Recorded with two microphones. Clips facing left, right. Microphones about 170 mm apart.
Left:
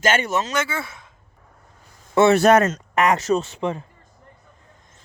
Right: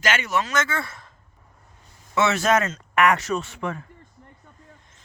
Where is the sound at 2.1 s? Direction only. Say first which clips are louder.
Left 7 dB; 50° left (ahead or behind).